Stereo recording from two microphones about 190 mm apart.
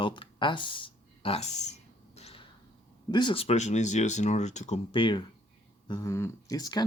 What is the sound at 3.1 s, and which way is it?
Speech, 25° left (ahead or behind).